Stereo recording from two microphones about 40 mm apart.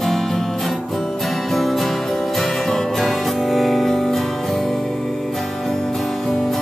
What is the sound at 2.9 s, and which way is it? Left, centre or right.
Music, centre.